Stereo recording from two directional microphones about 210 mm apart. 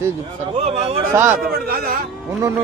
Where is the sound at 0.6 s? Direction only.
30° right (ahead or behind).